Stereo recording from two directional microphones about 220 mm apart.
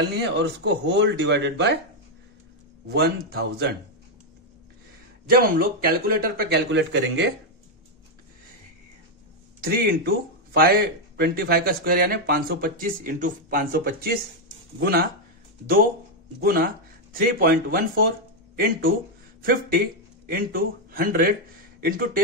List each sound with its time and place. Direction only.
0.2 s a man's voice: 55° right (ahead or behind)
2.9 s a man's voice: 45° right (ahead or behind)
5.3 s a man's voice: 40° right (ahead or behind)
9.6 s a man's voice: 45° right (ahead or behind)
16.3 s a man's voice: 45° right (ahead or behind)
19.4 s speech: 40° right (ahead or behind)